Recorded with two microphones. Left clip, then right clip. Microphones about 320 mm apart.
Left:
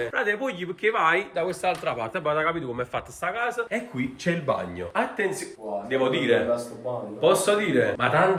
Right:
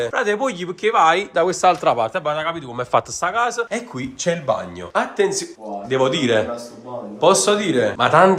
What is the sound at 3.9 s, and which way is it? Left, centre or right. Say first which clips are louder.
Speech: right 9 dB; right.